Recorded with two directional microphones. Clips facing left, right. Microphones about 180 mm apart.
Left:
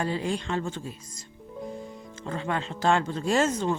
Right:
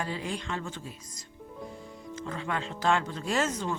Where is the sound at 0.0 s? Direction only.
30° left (ahead or behind).